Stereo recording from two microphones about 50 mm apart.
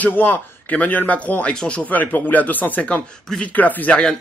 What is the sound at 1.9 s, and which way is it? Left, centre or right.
A man's voice, left.